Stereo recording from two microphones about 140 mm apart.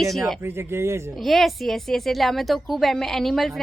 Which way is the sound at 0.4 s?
15° right (ahead or behind).